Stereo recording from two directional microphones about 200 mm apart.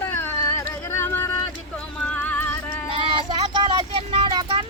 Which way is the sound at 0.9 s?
10° left (ahead or behind).